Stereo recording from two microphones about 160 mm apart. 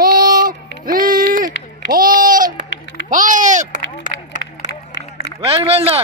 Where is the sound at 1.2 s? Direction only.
60° right (ahead or behind).